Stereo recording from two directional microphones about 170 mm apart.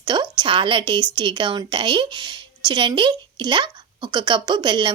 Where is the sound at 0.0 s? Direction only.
25° right (ahead or behind).